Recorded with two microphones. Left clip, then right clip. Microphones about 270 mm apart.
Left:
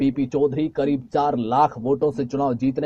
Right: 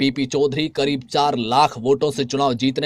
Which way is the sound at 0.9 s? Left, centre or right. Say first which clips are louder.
Right 3 dB; right.